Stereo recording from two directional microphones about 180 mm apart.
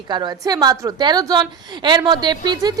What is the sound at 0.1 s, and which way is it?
A woman's voice, 25° right (ahead or behind).